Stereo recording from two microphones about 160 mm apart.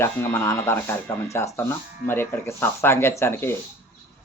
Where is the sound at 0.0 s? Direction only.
15° left (ahead or behind).